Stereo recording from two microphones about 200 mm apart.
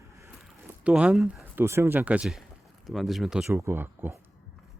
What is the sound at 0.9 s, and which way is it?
Speech, 5° right (ahead or behind).